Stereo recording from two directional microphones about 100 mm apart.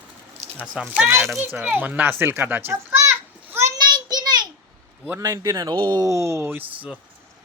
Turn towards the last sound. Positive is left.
turn(degrees=-25)  # may be behind; listen again after turning